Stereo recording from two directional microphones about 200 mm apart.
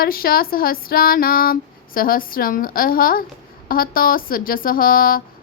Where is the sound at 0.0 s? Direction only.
50° left (ahead or behind).